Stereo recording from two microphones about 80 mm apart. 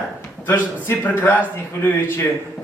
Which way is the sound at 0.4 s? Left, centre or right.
Left.